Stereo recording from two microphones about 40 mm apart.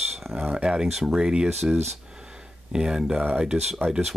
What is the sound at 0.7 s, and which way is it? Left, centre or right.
Speech, centre.